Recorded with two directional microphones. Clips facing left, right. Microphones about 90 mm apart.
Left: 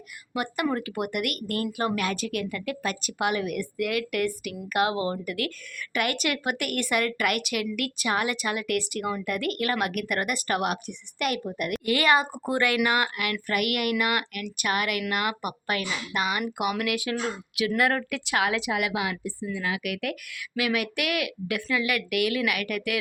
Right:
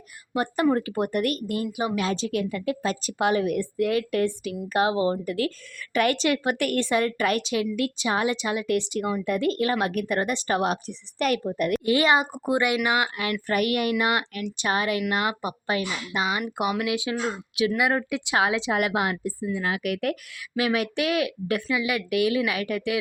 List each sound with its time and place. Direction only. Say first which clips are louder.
0.3 s a woman's voice: right 5 dB; 30° right (ahead or behind)
18.7 s speech: right 3 dB; 40° right (ahead or behind)
21.7 s a woman's voice: left 1 dB; 20° right (ahead or behind)